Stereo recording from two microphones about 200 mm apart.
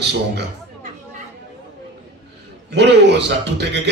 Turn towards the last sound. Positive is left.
turn(degrees=-60)  # may be behind; listen again after turning